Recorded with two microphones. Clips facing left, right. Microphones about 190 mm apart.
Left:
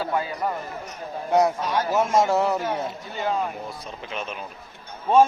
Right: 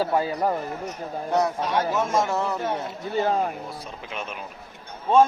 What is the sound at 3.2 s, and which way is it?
Speech, 40° right (ahead or behind).